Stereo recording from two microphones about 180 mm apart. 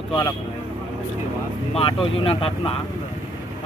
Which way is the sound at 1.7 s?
30° left (ahead or behind).